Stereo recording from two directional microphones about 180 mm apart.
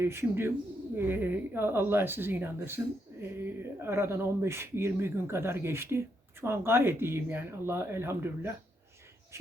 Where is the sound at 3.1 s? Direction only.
15° right (ahead or behind).